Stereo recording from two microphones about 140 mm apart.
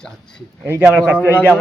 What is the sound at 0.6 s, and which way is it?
Speech, 15° right (ahead or behind).